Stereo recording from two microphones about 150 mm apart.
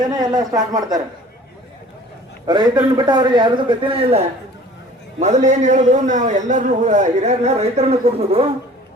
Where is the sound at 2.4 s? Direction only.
30° right (ahead or behind).